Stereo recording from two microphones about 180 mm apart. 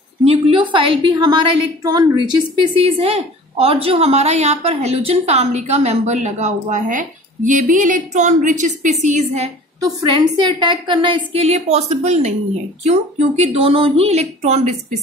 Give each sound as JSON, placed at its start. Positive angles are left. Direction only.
{"t": 0.2, "sound": "a woman's voice", "side_deg": -30}
{"t": 10.1, "sound": "a woman's voice", "side_deg": -25}